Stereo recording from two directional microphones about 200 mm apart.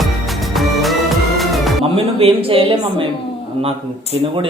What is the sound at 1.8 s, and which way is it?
Speech, 30° right (ahead or behind).